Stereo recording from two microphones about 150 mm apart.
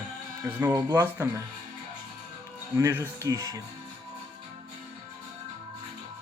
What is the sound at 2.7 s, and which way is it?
Speech, 15° right (ahead or behind).